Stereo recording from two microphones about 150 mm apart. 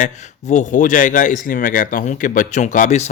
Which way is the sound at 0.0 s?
55° left (ahead or behind).